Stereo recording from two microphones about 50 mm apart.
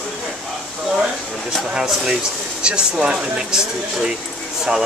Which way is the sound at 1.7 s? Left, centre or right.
Centre.